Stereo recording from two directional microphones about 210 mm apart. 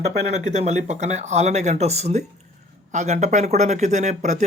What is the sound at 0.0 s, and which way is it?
Speech, 30° right (ahead or behind).